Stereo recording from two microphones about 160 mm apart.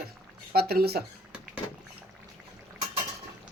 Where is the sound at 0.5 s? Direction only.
75° right (ahead or behind).